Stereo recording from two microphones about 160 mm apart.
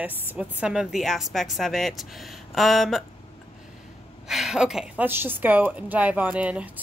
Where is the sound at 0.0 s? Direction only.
10° right (ahead or behind).